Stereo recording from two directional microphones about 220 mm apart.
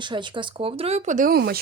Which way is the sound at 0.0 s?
20° right (ahead or behind).